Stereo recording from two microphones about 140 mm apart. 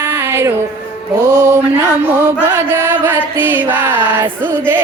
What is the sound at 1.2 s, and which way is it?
Mantra, 20° right (ahead or behind).